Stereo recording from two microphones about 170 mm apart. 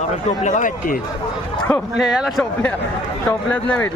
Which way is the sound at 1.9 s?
Centre (ahead or behind).